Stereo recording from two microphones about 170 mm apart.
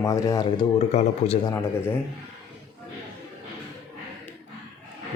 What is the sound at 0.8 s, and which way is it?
Speech, 35° left (ahead or behind).